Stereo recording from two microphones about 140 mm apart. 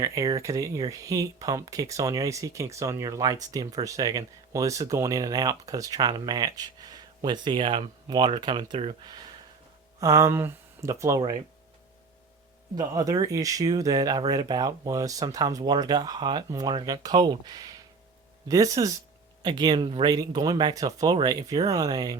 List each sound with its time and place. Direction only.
0.0 s speech: 25° right (ahead or behind)
10.0 s speech: 20° right (ahead or behind)
12.7 s speech: 25° right (ahead or behind)